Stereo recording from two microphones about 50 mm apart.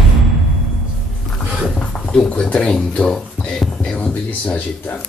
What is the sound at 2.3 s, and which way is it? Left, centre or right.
Speech, left.